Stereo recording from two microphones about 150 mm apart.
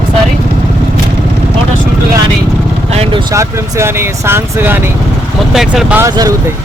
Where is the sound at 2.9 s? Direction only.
40° right (ahead or behind).